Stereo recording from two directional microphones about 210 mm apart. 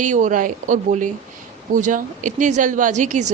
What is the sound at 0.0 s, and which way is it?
A woman's voice, 35° right (ahead or behind).